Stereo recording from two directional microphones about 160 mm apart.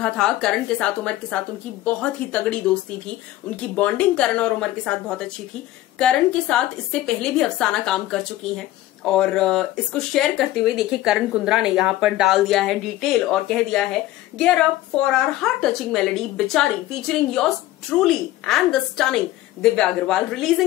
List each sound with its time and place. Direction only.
0.0 s a woman's voice: 5° left (ahead or behind)